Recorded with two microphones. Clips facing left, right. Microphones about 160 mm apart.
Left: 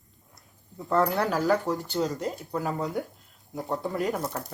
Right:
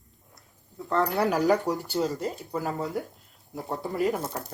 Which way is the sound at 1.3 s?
15° right (ahead or behind).